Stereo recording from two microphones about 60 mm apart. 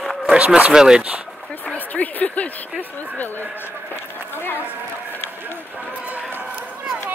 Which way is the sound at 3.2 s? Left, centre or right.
Left.